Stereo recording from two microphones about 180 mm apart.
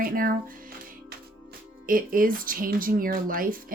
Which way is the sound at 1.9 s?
50° right (ahead or behind).